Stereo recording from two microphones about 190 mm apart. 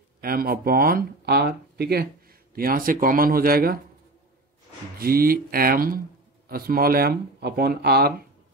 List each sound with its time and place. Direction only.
0.2 s speech: 50° right (ahead or behind)
4.9 s speech: 50° right (ahead or behind)